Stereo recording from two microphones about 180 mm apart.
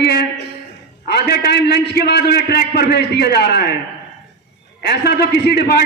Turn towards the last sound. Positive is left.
turn(degrees=65)  # may be behind; listen again after turning